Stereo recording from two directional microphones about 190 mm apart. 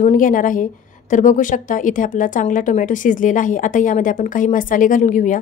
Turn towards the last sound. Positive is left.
turn(degrees=40)  # may be behind; listen again after turning